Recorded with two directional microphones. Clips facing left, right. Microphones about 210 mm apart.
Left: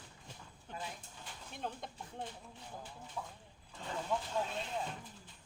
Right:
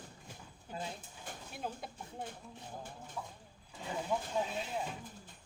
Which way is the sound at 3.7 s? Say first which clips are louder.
Right 2 dB; 10° right (ahead or behind).